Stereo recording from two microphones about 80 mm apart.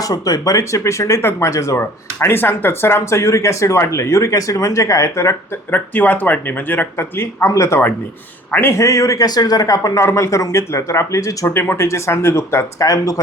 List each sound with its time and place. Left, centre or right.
0.0 s speech: left
1.8 s speech: left
5.7 s a man's voice: left
11.5 s speech: left
12.8 s a man's voice: left